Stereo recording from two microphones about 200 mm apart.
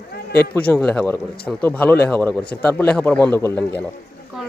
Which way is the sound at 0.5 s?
5° left (ahead or behind).